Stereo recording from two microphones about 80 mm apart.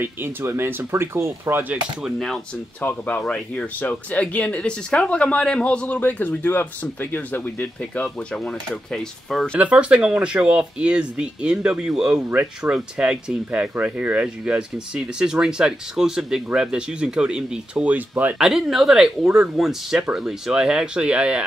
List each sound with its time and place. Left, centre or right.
0.0 s speech: right
2.0 s speech: centre
2.8 s speech: left
9.6 s speech: centre
12.3 s speech: right
12.7 s speech: centre
18.4 s speech: centre